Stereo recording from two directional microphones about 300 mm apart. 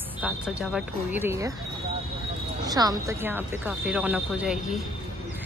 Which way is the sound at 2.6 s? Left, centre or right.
Centre.